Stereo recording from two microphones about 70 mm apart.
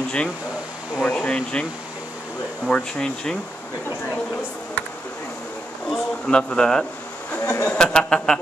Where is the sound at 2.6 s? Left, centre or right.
Centre.